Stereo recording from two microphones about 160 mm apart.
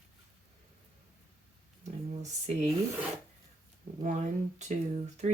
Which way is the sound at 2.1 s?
45° right (ahead or behind).